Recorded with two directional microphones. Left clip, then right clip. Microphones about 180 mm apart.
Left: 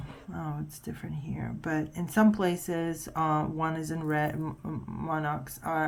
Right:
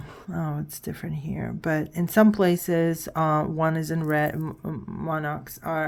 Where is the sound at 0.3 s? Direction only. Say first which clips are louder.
Right 6 dB; 35° right (ahead or behind).